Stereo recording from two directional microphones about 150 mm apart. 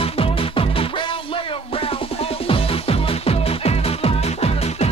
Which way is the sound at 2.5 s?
40° left (ahead or behind).